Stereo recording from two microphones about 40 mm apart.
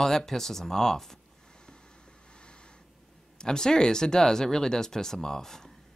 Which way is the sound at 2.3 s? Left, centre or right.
Left.